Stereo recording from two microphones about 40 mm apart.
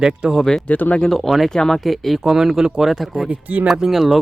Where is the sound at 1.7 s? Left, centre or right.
Centre.